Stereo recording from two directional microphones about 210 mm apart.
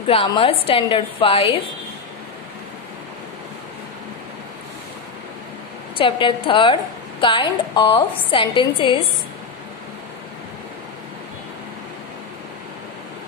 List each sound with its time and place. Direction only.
0.1 s a woman's voice: 25° left (ahead or behind)
5.9 s a woman's voice: 25° left (ahead or behind)